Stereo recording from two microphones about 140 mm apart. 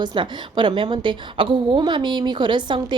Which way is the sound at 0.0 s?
35° right (ahead or behind).